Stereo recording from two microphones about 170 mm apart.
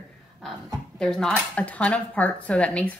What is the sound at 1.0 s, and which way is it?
A woman's voice, 5° left (ahead or behind).